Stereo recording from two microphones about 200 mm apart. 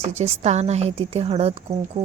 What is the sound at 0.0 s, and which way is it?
A woman's voice, 35° right (ahead or behind).